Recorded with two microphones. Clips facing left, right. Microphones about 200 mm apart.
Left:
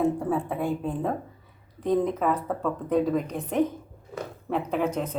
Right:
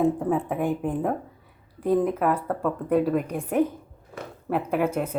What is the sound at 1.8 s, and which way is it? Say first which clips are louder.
A woman's voice: right 2 dB; 5° right (ahead or behind).